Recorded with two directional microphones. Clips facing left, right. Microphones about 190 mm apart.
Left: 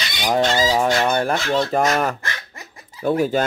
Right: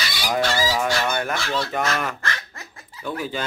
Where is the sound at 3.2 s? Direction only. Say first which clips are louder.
Left 9 dB; 45° left (ahead or behind).